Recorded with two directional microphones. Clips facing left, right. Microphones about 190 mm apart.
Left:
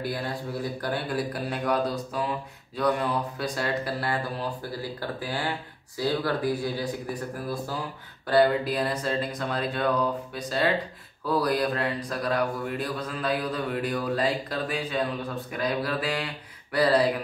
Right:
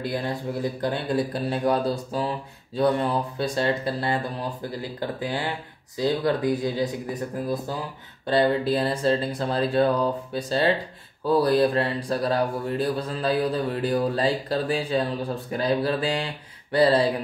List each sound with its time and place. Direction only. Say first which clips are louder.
0.0 s speech: right 3 dB; 25° right (ahead or behind)